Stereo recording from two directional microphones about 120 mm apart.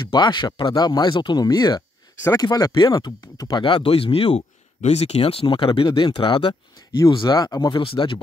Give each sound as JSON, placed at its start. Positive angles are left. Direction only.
{"t": 0.1, "sound": "speech", "side_deg": 40}
{"t": 3.6, "sound": "speech", "side_deg": 45}
{"t": 7.8, "sound": "speech", "side_deg": 45}